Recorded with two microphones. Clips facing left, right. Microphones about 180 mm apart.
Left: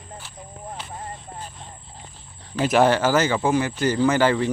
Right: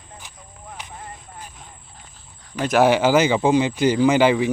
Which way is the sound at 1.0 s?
30° left (ahead or behind).